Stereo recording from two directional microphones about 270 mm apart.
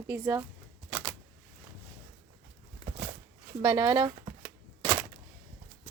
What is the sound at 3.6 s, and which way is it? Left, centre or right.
Chopping, centre.